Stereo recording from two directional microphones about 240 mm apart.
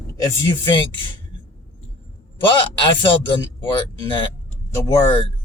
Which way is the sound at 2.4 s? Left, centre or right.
Left.